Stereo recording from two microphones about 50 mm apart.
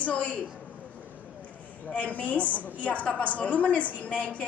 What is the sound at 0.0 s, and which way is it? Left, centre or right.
Speech, left.